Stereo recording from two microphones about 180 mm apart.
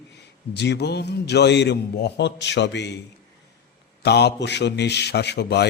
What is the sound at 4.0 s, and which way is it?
A man's voice, 65° left (ahead or behind).